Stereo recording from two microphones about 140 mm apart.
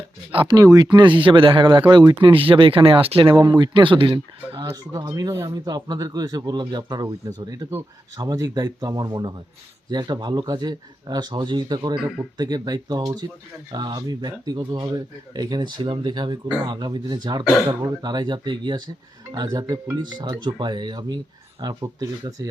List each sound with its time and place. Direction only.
0.3 s speech: 30° right (ahead or behind)
4.6 s speech: 20° right (ahead or behind)
11.9 s speech: 5° right (ahead or behind)
12.4 s speech: 30° right (ahead or behind)